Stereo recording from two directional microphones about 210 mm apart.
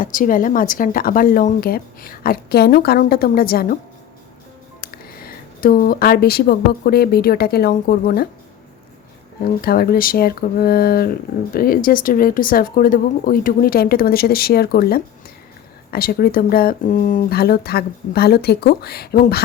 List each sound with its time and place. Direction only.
0.0 s speech: 40° left (ahead or behind)
4.8 s speech: 45° left (ahead or behind)
9.4 s speech: 45° left (ahead or behind)